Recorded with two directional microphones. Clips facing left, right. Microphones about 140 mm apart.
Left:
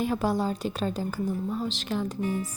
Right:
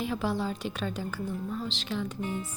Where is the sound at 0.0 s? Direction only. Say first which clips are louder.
Left 4 dB; 45° left (ahead or behind).